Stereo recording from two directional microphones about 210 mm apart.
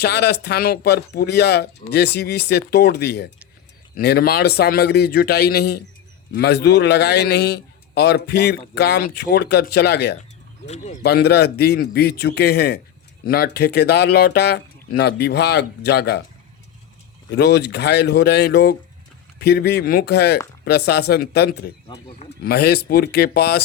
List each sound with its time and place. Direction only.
0.0 s a man's voice: 50° left (ahead or behind)
17.3 s a man's voice: 55° left (ahead or behind)
21.8 s speech: 30° left (ahead or behind)
22.4 s a man's voice: 50° left (ahead or behind)